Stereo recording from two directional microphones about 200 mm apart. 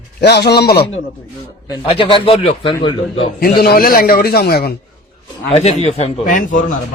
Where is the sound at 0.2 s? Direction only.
55° left (ahead or behind).